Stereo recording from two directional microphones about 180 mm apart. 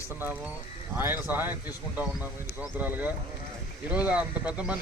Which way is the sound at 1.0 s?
10° right (ahead or behind).